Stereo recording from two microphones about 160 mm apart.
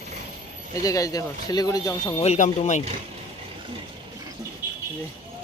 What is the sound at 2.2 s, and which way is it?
Speech, 45° left (ahead or behind).